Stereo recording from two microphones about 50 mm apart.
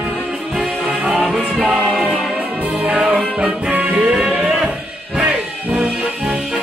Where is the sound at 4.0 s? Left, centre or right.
Centre.